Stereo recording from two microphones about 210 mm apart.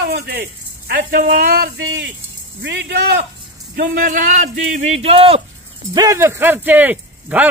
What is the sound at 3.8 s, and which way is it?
Speech, 40° right (ahead or behind).